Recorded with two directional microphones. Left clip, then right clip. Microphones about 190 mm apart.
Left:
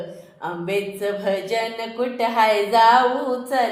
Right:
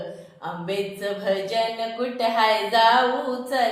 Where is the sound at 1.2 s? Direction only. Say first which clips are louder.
Right 1 dB; 45° left (ahead or behind).